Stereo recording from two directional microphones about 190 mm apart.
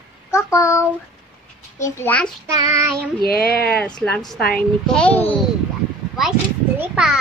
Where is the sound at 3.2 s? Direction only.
55° left (ahead or behind).